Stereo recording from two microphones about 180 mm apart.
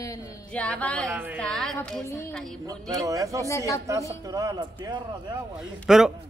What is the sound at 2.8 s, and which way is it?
A man's voice, 20° right (ahead or behind).